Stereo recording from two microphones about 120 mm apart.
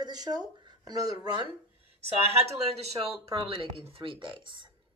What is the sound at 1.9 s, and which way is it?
Speech, 60° right (ahead or behind).